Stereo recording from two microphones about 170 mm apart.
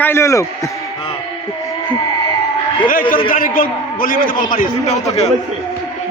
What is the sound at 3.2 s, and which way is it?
A man's voice, 55° left (ahead or behind).